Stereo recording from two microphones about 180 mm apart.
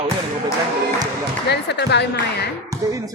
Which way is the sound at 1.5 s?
70° left (ahead or behind).